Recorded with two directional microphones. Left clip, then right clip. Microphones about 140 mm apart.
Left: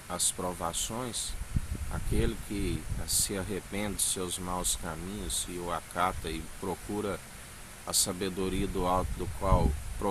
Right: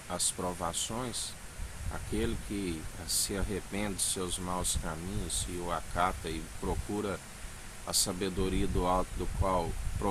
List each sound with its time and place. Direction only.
0.1 s speech: 15° left (ahead or behind)
2.5 s speech: 20° left (ahead or behind)